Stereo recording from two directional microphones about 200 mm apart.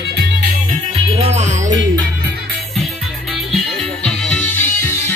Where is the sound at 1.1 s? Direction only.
30° right (ahead or behind).